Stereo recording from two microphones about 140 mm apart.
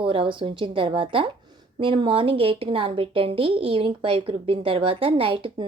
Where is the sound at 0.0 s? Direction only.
40° right (ahead or behind).